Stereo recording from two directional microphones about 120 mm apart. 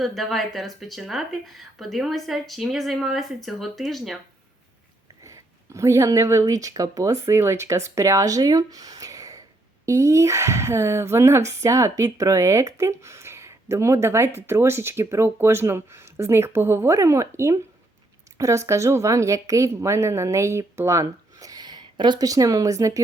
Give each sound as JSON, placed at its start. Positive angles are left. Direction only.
{"t": 0.0, "sound": "speech", "side_deg": 0}
{"t": 5.2, "sound": "speech", "side_deg": -25}